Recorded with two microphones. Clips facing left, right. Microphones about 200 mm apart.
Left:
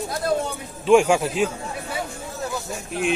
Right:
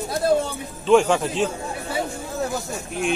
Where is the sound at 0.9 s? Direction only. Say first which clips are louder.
Left 1 dB; 10° left (ahead or behind).